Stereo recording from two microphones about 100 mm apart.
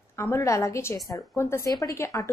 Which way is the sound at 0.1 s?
25° left (ahead or behind).